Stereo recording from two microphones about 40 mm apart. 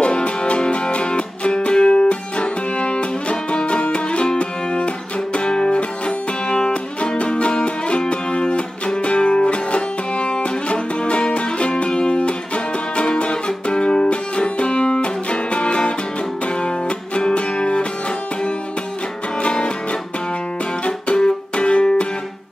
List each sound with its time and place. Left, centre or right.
0.0 s music: left
19.4 s music: left